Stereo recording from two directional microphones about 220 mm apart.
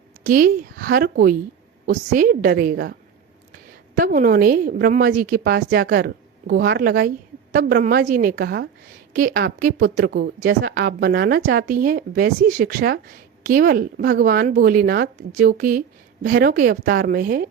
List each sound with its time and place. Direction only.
0.3 s a woman's voice: 40° right (ahead or behind)
3.9 s a woman's voice: 40° right (ahead or behind)